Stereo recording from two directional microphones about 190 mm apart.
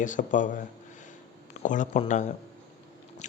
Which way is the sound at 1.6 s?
40° left (ahead or behind).